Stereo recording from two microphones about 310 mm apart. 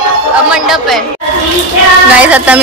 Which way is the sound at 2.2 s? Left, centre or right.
Centre.